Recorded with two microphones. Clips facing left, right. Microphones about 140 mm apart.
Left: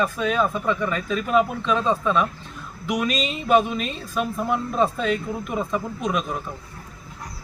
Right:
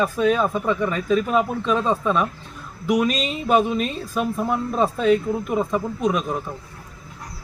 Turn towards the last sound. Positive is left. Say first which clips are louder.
# right 3 dB
turn(degrees=-5)  # may be behind; listen again after turning